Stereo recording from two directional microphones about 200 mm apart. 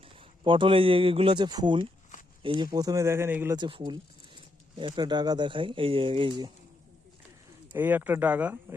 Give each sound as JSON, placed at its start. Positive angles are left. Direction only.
{"t": 0.0, "sound": "speech", "side_deg": -25}
{"t": 3.6, "sound": "speech", "side_deg": -25}
{"t": 7.7, "sound": "speech", "side_deg": -10}